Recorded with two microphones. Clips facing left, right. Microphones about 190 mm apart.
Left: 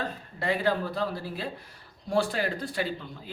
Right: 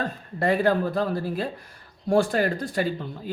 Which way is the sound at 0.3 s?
50° right (ahead or behind).